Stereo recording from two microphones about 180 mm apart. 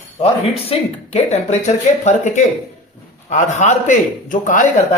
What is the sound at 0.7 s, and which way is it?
A man's voice, 35° left (ahead or behind).